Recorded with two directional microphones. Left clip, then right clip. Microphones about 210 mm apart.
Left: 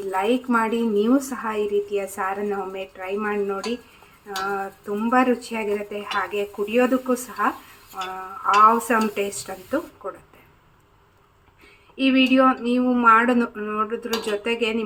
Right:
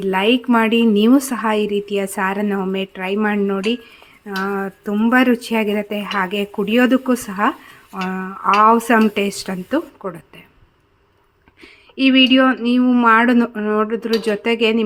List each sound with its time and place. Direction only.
0.1 s a woman's voice: 50° right (ahead or behind)
11.6 s a woman's voice: 55° right (ahead or behind)